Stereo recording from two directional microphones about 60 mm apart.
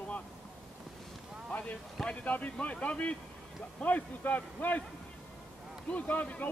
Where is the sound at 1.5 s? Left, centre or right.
Left.